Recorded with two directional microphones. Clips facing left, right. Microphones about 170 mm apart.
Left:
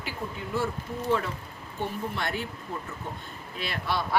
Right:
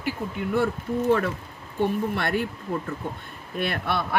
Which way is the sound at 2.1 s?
60° right (ahead or behind).